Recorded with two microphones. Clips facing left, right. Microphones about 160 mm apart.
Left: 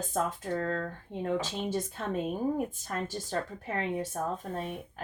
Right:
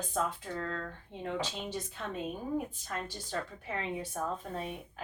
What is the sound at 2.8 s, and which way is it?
Speech, 45° left (ahead or behind).